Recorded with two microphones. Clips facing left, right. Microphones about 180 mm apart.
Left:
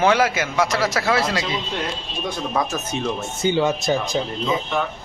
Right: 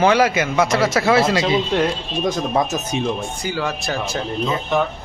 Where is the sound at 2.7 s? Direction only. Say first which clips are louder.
Right 3 dB; 15° right (ahead or behind).